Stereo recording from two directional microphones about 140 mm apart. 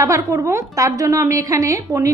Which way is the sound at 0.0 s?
20° right (ahead or behind).